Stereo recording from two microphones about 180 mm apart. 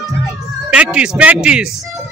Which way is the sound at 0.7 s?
5° right (ahead or behind).